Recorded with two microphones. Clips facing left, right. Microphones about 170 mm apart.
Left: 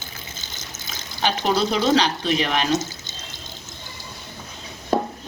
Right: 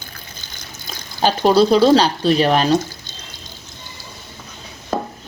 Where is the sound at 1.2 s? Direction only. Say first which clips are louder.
Right 8 dB; 35° right (ahead or behind).